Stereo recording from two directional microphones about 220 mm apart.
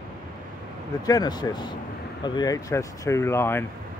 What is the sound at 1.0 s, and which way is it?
Speech, 15° left (ahead or behind).